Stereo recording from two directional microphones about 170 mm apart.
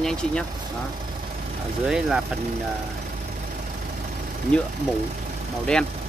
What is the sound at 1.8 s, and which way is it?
Speech, 5° right (ahead or behind).